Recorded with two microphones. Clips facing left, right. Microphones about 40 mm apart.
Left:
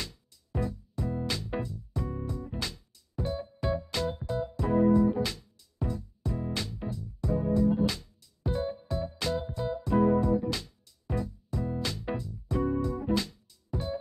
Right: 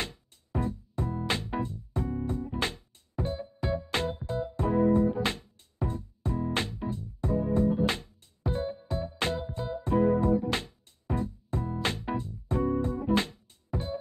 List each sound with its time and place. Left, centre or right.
0.0 s music: right